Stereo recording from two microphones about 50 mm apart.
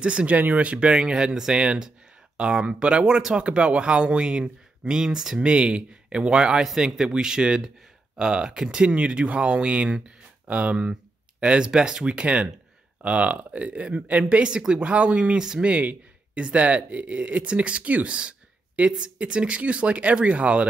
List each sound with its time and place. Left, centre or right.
0.0 s speech: right
8.8 s speech: right
15.7 s speech: right